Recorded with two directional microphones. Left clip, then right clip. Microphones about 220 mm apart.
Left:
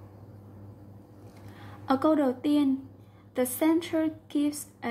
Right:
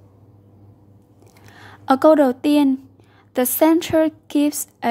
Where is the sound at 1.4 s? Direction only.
50° right (ahead or behind).